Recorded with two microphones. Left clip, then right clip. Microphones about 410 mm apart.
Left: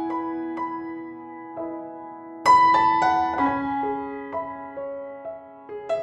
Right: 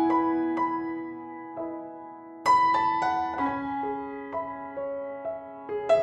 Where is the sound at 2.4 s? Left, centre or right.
Left.